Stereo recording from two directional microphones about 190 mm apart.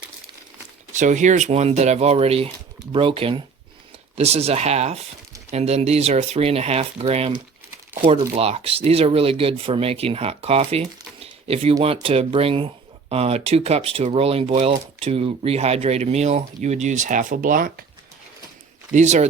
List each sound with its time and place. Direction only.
0.9 s speech: 40° right (ahead or behind)
8.4 s speech: 30° right (ahead or behind); by 17.8 s 45° right (ahead or behind)
18.9 s speech: 40° right (ahead or behind)